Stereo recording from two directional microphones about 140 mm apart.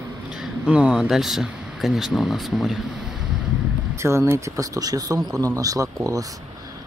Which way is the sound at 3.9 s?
20° right (ahead or behind).